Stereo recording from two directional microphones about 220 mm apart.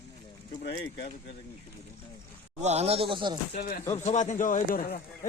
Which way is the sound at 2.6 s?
30° right (ahead or behind).